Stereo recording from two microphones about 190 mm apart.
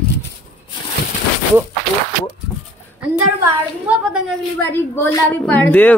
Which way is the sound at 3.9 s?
5° right (ahead or behind).